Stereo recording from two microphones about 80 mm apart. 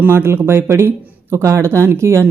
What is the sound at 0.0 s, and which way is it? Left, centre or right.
Speech, right.